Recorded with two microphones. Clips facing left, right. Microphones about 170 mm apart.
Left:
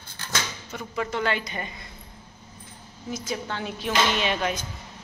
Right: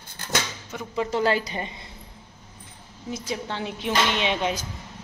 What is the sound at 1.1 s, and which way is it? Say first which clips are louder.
Music: right 6 dB; 35° right (ahead or behind).